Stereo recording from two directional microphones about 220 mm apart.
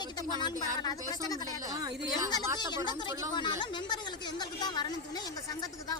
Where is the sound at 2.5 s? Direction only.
20° left (ahead or behind).